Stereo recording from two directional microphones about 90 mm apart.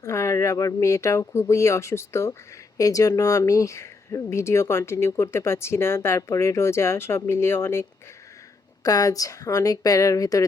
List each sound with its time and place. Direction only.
0.0 s speech: 35° left (ahead or behind)
8.8 s speech: 45° left (ahead or behind)